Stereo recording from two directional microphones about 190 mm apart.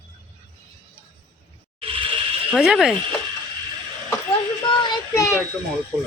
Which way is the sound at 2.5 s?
Centre (ahead or behind).